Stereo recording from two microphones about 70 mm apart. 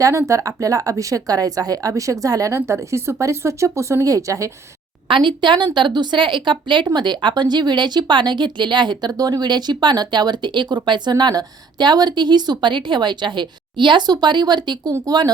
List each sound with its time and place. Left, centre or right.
0.0 s a woman's voice: right
2.6 s speech: right
5.4 s speech: right
15.0 s speech: right